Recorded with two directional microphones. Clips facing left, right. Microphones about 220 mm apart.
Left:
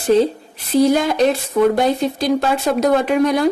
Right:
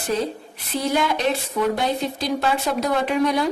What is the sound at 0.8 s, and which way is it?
A woman's voice, 40° left (ahead or behind).